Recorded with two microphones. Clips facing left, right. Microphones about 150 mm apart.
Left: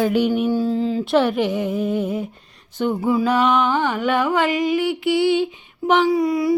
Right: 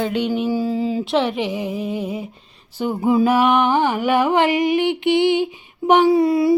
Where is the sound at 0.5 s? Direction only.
5° right (ahead or behind).